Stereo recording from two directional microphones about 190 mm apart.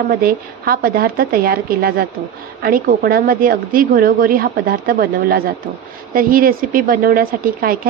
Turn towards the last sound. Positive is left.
turn(degrees=-50)  # may be behind; listen again after turning